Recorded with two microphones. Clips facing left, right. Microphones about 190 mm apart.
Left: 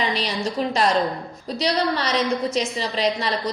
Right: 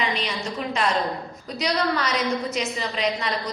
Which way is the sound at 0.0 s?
35° left (ahead or behind).